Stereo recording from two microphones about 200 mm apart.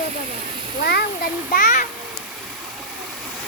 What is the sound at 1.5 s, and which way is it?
Speech, 40° left (ahead or behind).